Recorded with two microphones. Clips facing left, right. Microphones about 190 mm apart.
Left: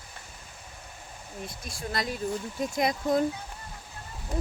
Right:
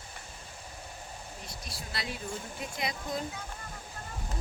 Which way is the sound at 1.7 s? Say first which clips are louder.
Left 7 dB; 45° left (ahead or behind).